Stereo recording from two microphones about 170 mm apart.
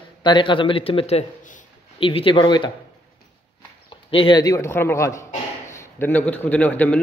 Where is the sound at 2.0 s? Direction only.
30° left (ahead or behind).